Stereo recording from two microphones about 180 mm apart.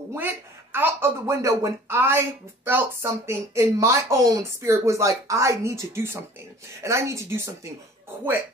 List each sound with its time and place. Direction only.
0.1 s speech: 15° right (ahead or behind)